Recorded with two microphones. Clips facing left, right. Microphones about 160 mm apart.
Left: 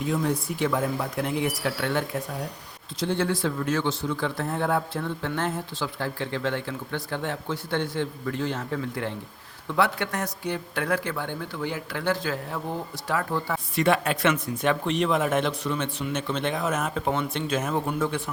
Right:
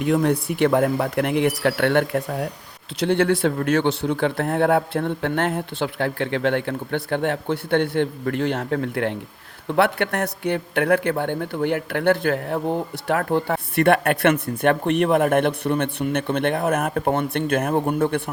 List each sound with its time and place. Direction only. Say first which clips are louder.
0.0 s speech: right 6 dB; 65° right (ahead or behind)